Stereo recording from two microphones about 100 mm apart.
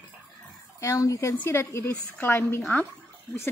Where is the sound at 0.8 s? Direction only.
30° left (ahead or behind).